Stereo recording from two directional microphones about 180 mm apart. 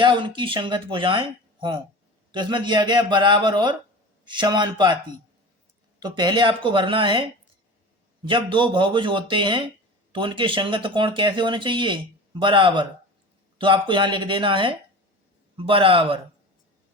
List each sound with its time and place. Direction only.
0.0 s speech: 25° right (ahead or behind)